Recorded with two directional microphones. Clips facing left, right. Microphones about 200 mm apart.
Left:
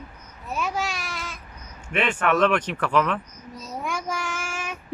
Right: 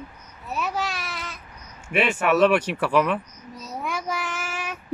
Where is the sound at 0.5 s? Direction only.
Centre (ahead or behind).